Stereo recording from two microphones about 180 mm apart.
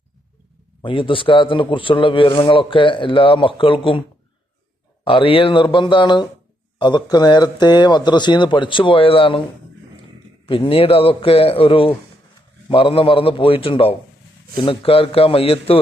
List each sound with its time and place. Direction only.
0.8 s speech: 30° left (ahead or behind)
5.0 s speech: 30° left (ahead or behind)
10.4 s a man's voice: 30° left (ahead or behind)